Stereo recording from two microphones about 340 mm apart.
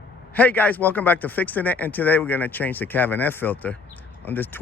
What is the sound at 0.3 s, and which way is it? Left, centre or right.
Speech, centre.